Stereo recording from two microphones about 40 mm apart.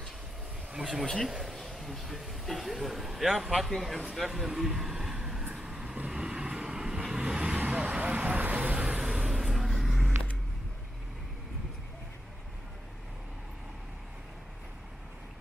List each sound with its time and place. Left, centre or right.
0.7 s a man's voice: centre
1.0 s speech: centre
1.8 s a man's voice: centre
5.1 s vehicle: centre
7.8 s vehicle: right
8.7 s vehicle: right
9.0 s a sound: centre
9.8 s vehicle: centre